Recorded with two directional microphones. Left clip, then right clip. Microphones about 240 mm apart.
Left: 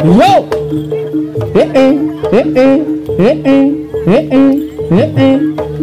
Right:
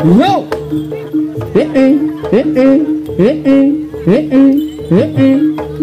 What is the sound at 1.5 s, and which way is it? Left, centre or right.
Music, left.